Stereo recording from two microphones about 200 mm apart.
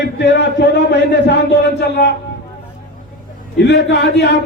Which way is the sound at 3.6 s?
60° left (ahead or behind).